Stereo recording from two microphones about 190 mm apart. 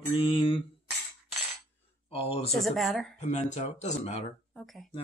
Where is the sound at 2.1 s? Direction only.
30° left (ahead or behind).